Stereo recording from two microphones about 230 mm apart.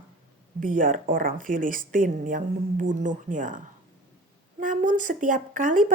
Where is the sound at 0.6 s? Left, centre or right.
Right.